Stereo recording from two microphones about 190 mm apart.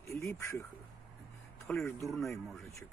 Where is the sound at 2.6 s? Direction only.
15° left (ahead or behind).